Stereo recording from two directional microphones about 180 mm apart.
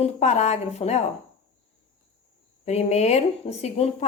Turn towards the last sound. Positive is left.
turn(degrees=35)  # may be behind; listen again after turning